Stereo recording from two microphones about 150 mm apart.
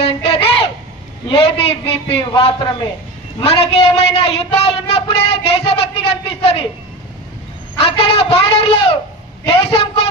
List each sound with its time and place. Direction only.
0.3 s a sound: 40° left (ahead or behind)
1.3 s speech: 40° left (ahead or behind)
7.8 s a man's voice: 40° left (ahead or behind)